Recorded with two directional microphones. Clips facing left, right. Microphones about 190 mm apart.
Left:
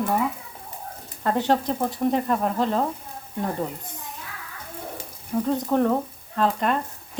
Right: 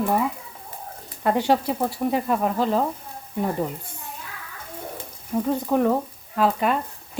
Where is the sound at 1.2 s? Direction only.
10° right (ahead or behind).